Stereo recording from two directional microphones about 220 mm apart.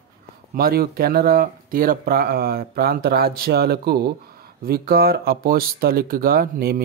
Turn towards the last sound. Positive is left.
turn(degrees=-45)  # may be behind; listen again after turning